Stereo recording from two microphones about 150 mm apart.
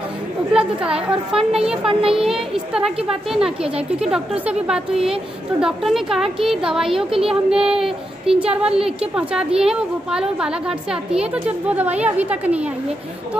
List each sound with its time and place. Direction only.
0.5 s a woman's voice: 5° right (ahead or behind)
1.9 s child singing: 40° right (ahead or behind)
2.1 s a woman's voice: 5° right (ahead or behind)